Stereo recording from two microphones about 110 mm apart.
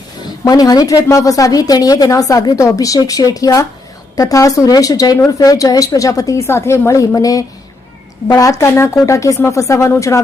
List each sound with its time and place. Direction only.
0.3 s a woman's voice: 35° left (ahead or behind)